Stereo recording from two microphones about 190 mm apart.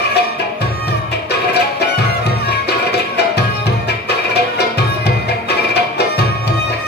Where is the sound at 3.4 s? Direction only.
60° left (ahead or behind).